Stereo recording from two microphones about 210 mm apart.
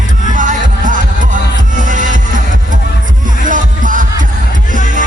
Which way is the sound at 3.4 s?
40° right (ahead or behind).